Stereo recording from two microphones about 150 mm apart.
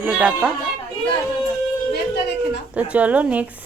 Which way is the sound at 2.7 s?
10° right (ahead or behind).